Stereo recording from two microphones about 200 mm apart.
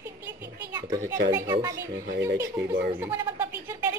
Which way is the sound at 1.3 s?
15° right (ahead or behind).